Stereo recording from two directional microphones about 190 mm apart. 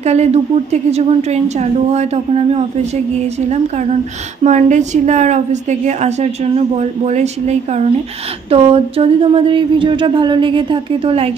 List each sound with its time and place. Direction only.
0.0 s a woman's voice: 35° right (ahead or behind)